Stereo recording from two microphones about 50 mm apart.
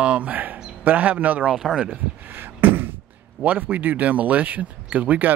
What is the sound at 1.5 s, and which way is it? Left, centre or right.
Speech, centre.